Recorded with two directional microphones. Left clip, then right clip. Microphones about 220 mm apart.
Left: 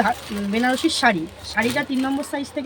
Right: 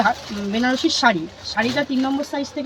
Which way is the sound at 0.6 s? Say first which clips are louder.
Right 1 dB; 15° left (ahead or behind).